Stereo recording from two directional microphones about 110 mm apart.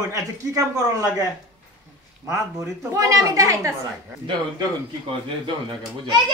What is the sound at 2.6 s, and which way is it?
A man's voice, 30° right (ahead or behind).